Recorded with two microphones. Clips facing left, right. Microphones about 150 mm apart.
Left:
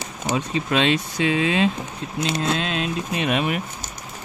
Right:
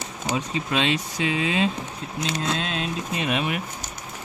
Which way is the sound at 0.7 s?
60° left (ahead or behind).